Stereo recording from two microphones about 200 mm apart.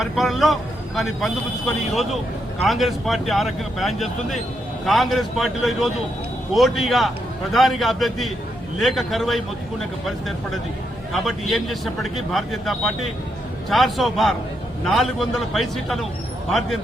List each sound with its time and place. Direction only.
0.0 s a man's voice: centre (ahead or behind)
11.1 s a man's voice: centre (ahead or behind)